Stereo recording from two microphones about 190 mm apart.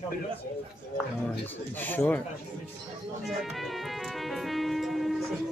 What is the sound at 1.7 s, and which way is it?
Speech, 10° left (ahead or behind).